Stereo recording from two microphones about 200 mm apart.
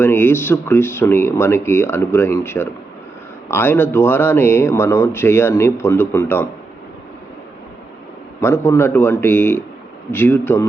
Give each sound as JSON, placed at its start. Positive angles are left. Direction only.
{"t": 0.0, "sound": "speech", "side_deg": 10}
{"t": 8.4, "sound": "speech", "side_deg": 10}